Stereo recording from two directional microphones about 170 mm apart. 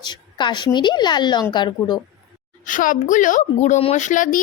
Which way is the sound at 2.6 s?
50° left (ahead or behind).